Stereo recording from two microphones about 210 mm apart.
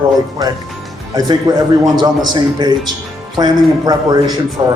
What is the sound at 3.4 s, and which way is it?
Speech, 20° right (ahead or behind).